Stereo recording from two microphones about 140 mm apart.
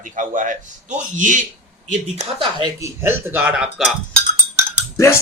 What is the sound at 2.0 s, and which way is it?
Speech, 50° right (ahead or behind).